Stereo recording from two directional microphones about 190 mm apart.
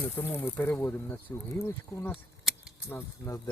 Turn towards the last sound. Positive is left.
turn(degrees=15)  # may be behind; listen again after turning